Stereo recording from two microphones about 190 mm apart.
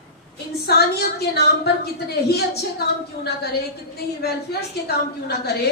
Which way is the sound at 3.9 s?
55° left (ahead or behind).